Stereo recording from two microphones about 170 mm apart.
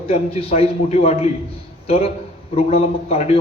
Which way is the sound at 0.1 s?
35° left (ahead or behind).